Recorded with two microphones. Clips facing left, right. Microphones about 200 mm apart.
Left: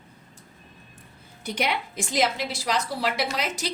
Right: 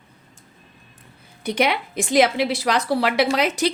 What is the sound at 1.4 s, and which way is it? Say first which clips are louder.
A woman's voice: right 6 dB; 65° right (ahead or behind).